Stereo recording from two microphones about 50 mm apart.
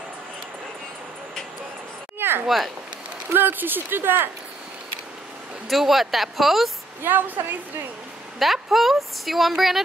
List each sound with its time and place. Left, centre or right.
2.1 s a sound: right
2.4 s a woman's voice: centre
3.3 s speech: right
5.7 s a woman's voice: centre
7.0 s a woman's voice: right
8.4 s a woman's voice: centre